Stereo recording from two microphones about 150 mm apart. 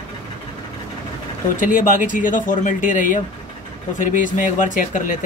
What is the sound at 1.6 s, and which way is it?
Speech, 60° left (ahead or behind).